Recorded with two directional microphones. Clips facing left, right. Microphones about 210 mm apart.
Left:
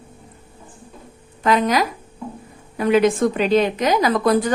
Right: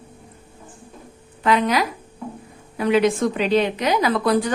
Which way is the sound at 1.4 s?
45° left (ahead or behind).